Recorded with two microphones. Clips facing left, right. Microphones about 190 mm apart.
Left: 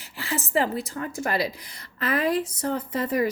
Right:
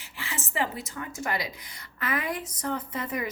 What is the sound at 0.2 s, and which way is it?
A woman's voice, 40° left (ahead or behind).